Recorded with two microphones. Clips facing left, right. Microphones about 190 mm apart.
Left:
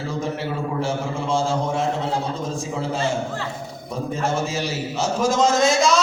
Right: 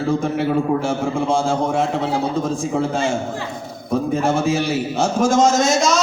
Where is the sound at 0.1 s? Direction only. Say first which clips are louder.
Right 8 dB; 50° right (ahead or behind).